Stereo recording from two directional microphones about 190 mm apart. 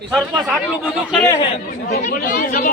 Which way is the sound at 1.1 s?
5° left (ahead or behind).